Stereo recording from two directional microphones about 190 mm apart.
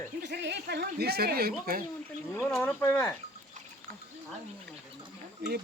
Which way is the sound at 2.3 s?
10° left (ahead or behind).